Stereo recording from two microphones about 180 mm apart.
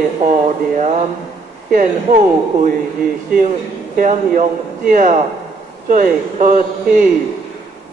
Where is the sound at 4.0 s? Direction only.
50° right (ahead or behind).